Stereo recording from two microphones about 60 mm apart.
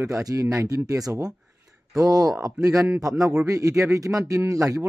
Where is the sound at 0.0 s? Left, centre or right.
Right.